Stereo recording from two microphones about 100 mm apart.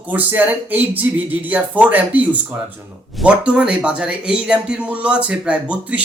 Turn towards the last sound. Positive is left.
turn(degrees=-15)  # may be behind; listen again after turning